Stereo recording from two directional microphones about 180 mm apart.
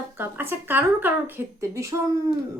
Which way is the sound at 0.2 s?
10° right (ahead or behind).